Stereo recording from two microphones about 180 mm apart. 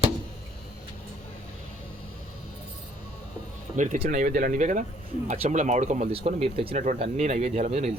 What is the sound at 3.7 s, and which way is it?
Speech, 45° right (ahead or behind).